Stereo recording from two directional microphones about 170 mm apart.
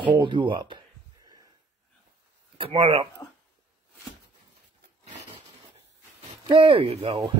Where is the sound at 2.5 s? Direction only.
30° right (ahead or behind).